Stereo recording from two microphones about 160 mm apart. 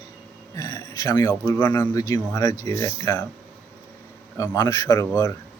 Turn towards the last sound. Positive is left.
turn(degrees=20)  # may be behind; listen again after turning